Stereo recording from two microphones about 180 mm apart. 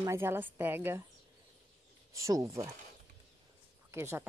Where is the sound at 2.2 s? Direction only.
15° right (ahead or behind).